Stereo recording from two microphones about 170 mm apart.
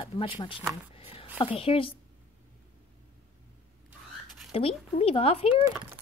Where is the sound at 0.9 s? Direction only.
35° left (ahead or behind).